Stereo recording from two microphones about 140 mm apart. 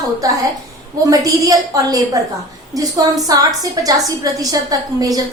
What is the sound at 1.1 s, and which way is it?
A woman's voice, 25° right (ahead or behind).